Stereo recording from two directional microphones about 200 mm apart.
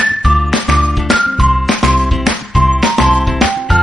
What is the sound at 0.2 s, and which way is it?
Music, centre (ahead or behind).